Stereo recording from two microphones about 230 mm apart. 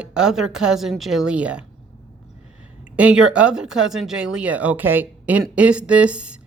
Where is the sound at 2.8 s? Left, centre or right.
Centre.